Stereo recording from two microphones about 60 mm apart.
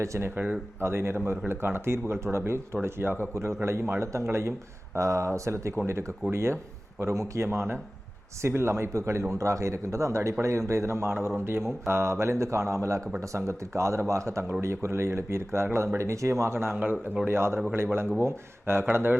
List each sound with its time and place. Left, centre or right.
0.0 s speech: right
0.3 s speech: right
0.8 s speech: right
3.3 s speech: right
16.8 s speech: right
17.2 s speech: right